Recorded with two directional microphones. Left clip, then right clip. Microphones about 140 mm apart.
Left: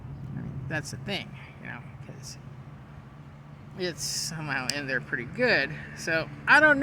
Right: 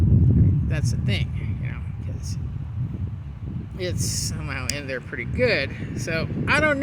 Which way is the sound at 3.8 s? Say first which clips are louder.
Right 3 dB; 20° left (ahead or behind).